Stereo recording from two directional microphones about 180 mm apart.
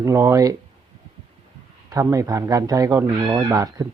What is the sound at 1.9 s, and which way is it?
Speech, 20° right (ahead or behind).